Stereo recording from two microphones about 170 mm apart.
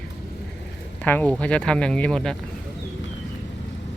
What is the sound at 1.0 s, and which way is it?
Speech, 5° left (ahead or behind).